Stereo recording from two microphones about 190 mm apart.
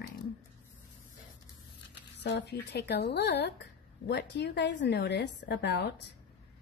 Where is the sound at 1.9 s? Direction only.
65° left (ahead or behind).